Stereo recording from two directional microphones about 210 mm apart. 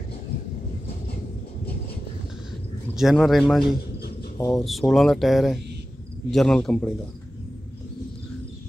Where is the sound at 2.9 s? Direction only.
Centre (ahead or behind).